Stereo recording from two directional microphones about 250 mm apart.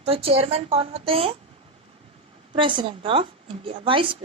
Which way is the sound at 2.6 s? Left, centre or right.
Centre.